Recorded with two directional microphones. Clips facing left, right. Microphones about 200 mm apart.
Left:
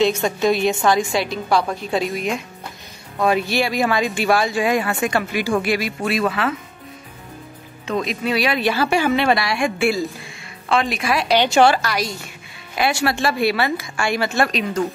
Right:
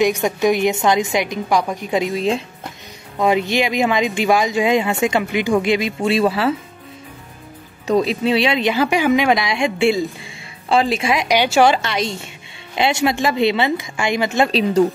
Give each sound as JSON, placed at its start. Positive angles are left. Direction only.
{"t": 0.0, "sound": "a woman's voice", "side_deg": -15}
{"t": 7.8, "sound": "a woman's voice", "side_deg": -35}
{"t": 11.7, "sound": "speech", "side_deg": -25}
{"t": 14.5, "sound": "speech", "side_deg": -35}